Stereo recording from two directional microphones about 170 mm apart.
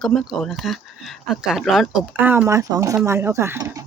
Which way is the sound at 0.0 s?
Centre (ahead or behind).